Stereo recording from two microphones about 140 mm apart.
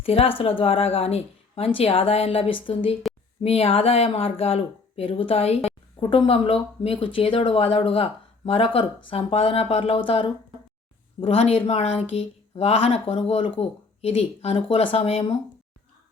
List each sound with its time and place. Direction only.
0.0 s speech: 45° left (ahead or behind)